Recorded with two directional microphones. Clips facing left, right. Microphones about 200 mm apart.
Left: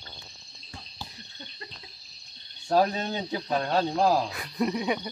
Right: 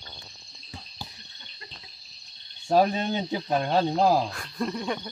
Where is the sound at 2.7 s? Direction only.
15° right (ahead or behind).